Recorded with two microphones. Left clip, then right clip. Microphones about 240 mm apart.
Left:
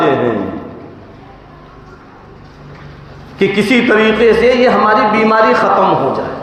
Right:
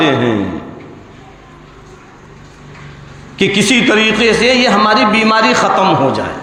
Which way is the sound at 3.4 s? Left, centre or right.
Right.